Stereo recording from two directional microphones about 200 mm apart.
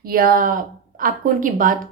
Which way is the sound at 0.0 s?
45° right (ahead or behind).